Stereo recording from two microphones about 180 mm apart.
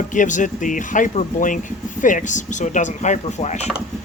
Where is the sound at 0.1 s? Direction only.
45° left (ahead or behind).